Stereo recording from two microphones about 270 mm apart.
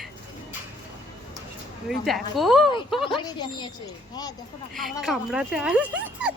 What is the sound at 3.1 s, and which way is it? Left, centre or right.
Speech, centre.